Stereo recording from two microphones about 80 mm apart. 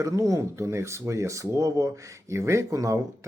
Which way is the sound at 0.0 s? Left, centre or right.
Right.